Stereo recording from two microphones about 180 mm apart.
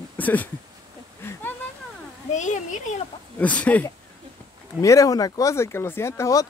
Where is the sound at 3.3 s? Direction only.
10° left (ahead or behind).